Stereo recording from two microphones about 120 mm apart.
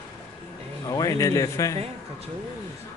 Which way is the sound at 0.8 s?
30° left (ahead or behind).